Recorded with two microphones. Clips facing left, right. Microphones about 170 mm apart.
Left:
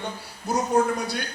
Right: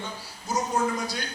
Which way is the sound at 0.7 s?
60° left (ahead or behind).